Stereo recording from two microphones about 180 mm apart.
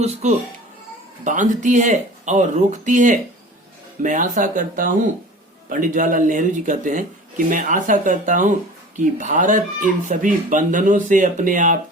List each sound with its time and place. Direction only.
0.0 s speech: 40° right (ahead or behind)